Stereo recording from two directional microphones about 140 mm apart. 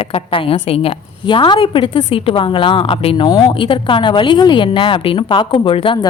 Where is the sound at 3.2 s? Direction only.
30° left (ahead or behind).